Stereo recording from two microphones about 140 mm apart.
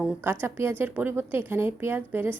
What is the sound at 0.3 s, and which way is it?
Speech, 15° right (ahead or behind).